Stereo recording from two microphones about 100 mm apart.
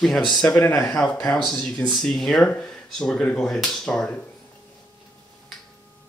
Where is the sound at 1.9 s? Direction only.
5° left (ahead or behind).